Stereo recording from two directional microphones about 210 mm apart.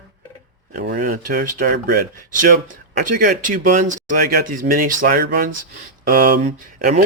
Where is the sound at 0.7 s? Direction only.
35° right (ahead or behind).